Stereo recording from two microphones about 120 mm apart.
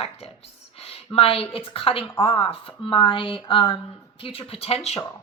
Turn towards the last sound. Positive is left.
turn(degrees=60)  # may be behind; listen again after turning